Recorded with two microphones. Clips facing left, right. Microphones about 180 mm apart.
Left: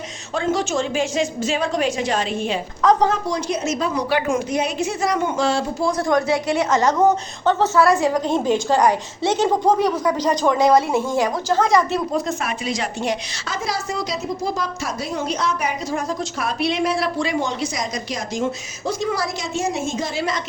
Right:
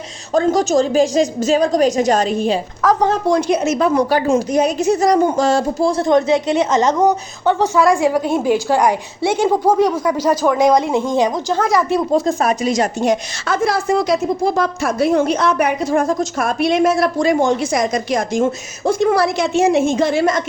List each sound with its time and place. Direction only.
0.3 s a woman's voice: 40° right (ahead or behind)
3.2 s a woman's voice: 55° right (ahead or behind)
4.4 s a woman's voice: 40° right (ahead or behind)
5.9 s a woman's voice: 25° right (ahead or behind)
12.1 s a woman's voice: 35° right (ahead or behind); by 20.4 s 50° right (ahead or behind)